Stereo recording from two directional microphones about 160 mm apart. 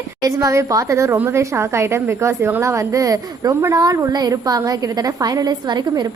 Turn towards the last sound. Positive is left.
turn(degrees=-25)  # may be behind; listen again after turning